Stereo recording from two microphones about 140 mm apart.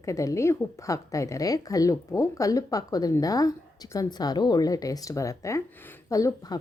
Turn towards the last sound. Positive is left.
turn(degrees=25)  # may be behind; listen again after turning